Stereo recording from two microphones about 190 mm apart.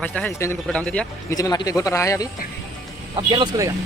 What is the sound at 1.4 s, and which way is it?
Speech, 20° left (ahead or behind).